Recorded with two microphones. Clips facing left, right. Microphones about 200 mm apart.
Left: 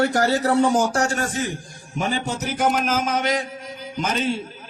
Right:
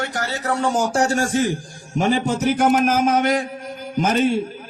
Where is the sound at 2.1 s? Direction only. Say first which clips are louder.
Right 10 dB; 55° right (ahead or behind).